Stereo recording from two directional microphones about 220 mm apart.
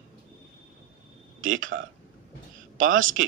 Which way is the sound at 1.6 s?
60° right (ahead or behind).